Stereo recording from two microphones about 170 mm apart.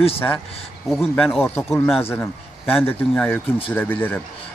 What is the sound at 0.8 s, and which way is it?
Speech, centre (ahead or behind).